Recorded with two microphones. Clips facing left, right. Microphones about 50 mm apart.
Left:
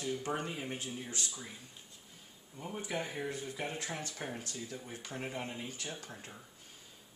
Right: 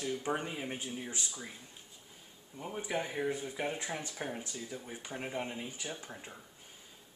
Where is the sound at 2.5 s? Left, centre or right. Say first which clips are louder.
Right 2 dB; centre.